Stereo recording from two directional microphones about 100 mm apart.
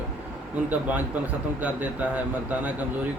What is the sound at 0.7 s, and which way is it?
Speech, 15° right (ahead or behind).